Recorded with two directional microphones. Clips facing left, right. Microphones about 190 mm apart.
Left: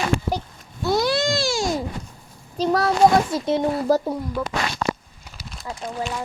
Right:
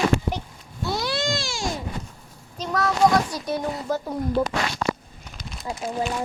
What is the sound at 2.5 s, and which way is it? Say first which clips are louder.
A child's voice: left 4 dB; 30° left (ahead or behind).